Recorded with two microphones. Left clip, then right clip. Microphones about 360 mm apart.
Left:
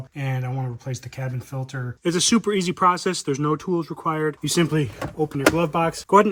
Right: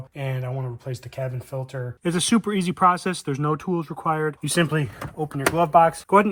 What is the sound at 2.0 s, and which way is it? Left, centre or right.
Speech, centre.